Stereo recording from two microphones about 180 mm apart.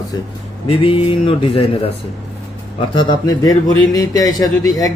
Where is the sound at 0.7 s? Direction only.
30° left (ahead or behind).